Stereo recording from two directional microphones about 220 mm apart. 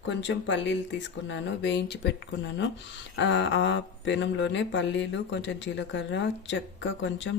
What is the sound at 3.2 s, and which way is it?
Mantra, 55° left (ahead or behind).